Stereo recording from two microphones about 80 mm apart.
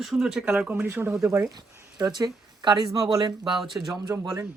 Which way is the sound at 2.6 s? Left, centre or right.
Right.